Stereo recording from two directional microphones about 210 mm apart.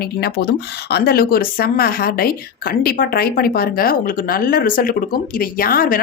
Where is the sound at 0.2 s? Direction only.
50° left (ahead or behind).